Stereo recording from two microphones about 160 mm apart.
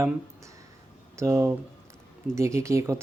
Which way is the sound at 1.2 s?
20° right (ahead or behind).